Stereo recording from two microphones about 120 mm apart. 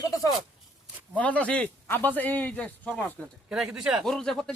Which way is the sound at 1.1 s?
10° left (ahead or behind).